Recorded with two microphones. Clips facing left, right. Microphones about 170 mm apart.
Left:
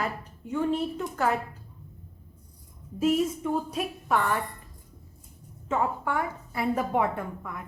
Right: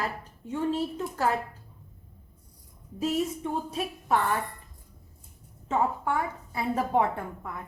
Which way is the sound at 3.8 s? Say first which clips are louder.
Even; 30° right (ahead or behind).